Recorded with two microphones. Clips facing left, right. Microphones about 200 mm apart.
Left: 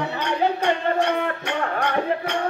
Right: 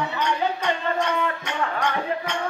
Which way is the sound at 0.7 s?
55° left (ahead or behind).